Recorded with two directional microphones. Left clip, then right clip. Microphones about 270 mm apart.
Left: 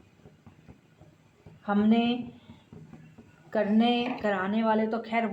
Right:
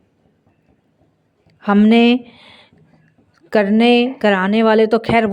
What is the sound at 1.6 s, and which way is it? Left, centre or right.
Speech, right.